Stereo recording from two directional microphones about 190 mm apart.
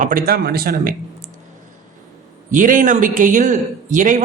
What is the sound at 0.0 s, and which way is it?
Speech, 45° right (ahead or behind).